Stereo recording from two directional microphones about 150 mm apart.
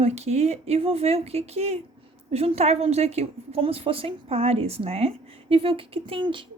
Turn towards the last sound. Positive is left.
turn(degrees=-35)  # may be behind; listen again after turning